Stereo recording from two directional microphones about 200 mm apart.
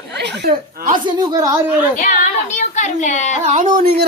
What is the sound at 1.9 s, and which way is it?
A woman's voice, 40° left (ahead or behind).